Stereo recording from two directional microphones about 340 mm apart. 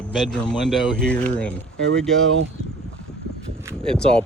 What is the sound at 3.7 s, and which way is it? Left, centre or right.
Speech, centre.